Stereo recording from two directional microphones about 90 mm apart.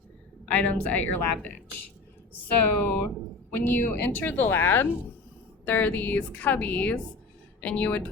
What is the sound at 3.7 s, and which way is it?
Speech, 20° left (ahead or behind).